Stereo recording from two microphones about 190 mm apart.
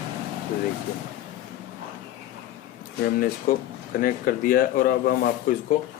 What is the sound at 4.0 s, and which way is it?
Speech, 50° left (ahead or behind).